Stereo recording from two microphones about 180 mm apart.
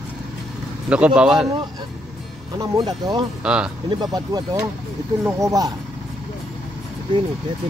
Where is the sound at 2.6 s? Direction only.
20° right (ahead or behind).